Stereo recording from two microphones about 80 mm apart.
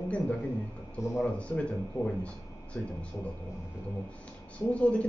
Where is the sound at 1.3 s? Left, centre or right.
Centre.